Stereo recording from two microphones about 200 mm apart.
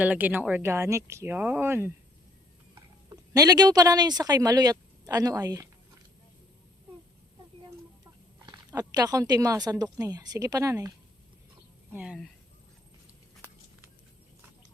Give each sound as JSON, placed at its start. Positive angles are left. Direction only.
{"t": 0.0, "sound": "speech", "side_deg": -10}
{"t": 3.1, "sound": "speech", "side_deg": -20}
{"t": 8.4, "sound": "speech", "side_deg": -20}
{"t": 11.9, "sound": "speech", "side_deg": -5}